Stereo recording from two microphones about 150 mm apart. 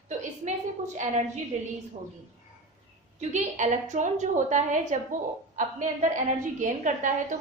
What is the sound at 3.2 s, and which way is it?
A woman's voice, 50° right (ahead or behind).